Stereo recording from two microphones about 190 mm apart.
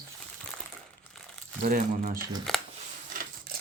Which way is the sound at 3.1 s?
50° right (ahead or behind).